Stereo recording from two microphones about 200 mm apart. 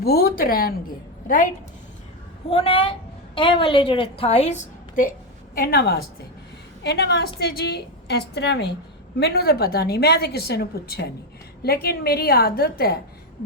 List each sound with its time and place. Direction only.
0.0 s a woman's voice: 50° left (ahead or behind)
2.5 s a woman's voice: 30° left (ahead or behind)
5.5 s a woman's voice: 50° left (ahead or behind)